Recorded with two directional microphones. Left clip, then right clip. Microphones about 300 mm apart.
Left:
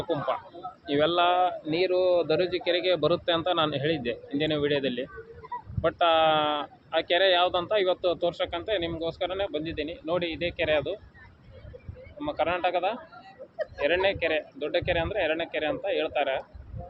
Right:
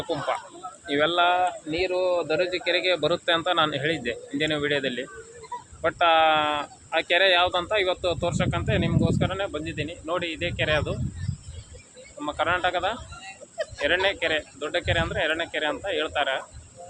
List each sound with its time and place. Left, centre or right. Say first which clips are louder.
0.9 s speech: right 2 dB; centre
12.2 s speech: right 2 dB; centre
13.2 s a sound: right 2 dB; right
13.8 s speech: right 1 dB; centre